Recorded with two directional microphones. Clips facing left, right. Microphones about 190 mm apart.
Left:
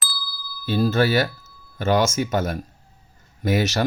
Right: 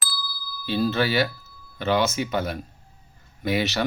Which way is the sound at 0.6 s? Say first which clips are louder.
Left 3 dB; 45° left (ahead or behind).